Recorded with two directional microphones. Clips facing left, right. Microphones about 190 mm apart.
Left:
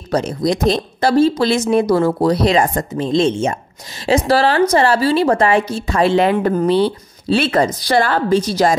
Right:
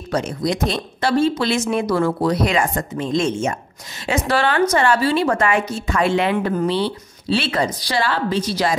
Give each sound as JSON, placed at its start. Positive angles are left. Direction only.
{"t": 0.1, "sound": "a woman's voice", "side_deg": 35}